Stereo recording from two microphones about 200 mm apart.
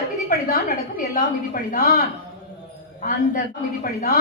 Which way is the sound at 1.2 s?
45° left (ahead or behind).